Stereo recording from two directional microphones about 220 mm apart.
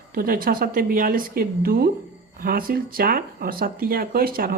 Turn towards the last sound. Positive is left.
turn(degrees=-40)  # may be behind; listen again after turning